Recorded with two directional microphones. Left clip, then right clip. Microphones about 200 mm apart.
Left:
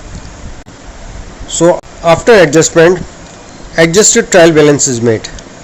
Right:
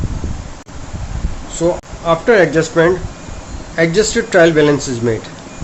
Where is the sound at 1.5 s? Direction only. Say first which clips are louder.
Left 8 dB; 40° left (ahead or behind).